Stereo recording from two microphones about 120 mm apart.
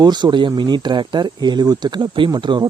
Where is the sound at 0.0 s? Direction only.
35° right (ahead or behind).